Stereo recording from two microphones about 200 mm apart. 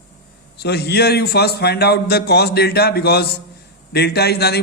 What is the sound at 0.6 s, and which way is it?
A man's voice, 55° left (ahead or behind).